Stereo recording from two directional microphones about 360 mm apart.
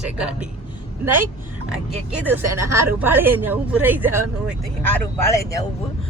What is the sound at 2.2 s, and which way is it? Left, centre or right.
Speech, centre.